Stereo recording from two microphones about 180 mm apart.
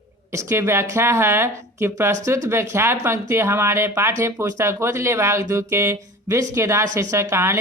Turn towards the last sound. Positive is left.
turn(degrees=-15)  # may be behind; listen again after turning